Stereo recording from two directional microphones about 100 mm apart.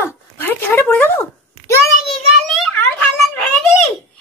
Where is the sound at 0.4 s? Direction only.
20° left (ahead or behind).